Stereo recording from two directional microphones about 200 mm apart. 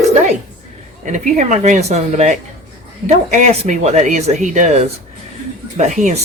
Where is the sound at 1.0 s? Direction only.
35° right (ahead or behind).